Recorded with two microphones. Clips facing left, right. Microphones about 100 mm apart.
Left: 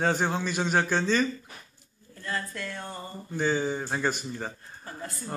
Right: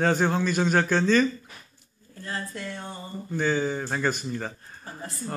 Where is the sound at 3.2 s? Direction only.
15° left (ahead or behind).